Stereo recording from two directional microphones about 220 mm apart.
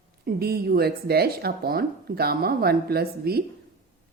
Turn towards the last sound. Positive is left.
turn(degrees=-45)  # may be behind; listen again after turning